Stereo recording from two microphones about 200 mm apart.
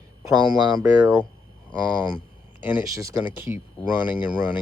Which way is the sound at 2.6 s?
10° right (ahead or behind).